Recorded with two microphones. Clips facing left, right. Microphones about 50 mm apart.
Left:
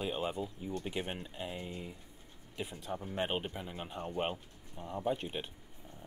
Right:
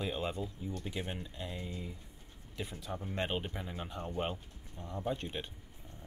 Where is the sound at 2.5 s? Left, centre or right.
Centre.